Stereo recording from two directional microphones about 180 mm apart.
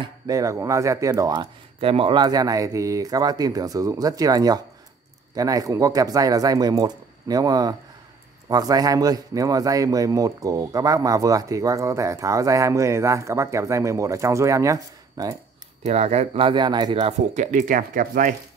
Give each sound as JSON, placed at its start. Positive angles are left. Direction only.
{"t": 0.0, "sound": "a man's voice", "side_deg": -20}
{"t": 15.8, "sound": "speech", "side_deg": -35}
{"t": 17.0, "sound": "speech", "side_deg": -40}